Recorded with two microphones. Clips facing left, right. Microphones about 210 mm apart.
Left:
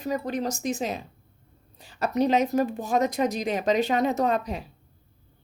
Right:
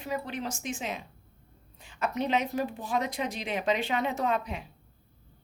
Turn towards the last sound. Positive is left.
turn(degrees=40)  # may be behind; listen again after turning